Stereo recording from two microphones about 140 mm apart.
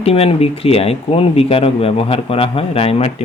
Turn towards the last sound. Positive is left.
turn(degrees=45)  # may be behind; listen again after turning